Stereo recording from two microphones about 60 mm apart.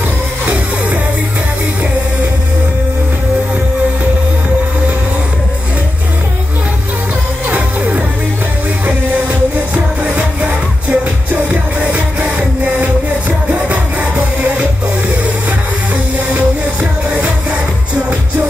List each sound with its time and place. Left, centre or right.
7.4 s music: right
10.0 s music: right